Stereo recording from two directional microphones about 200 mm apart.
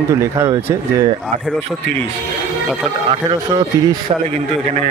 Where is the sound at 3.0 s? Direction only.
20° right (ahead or behind).